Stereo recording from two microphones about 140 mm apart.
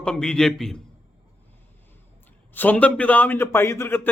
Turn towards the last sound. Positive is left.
turn(degrees=15)  # may be behind; listen again after turning